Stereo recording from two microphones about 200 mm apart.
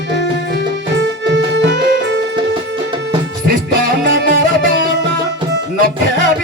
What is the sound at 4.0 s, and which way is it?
Music, 45° right (ahead or behind).